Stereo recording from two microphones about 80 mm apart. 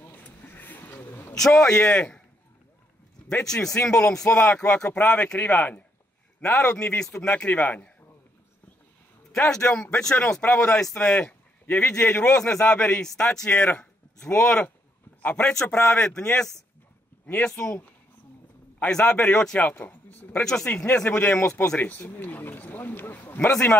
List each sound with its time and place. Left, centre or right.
0.0 s a sound: left
1.3 s a man's voice: centre
3.3 s a man's voice: centre
9.3 s a man's voice: centre
13.5 s speech: left
14.2 s a man's voice: centre
18.8 s a man's voice: centre
20.4 s a man's voice: centre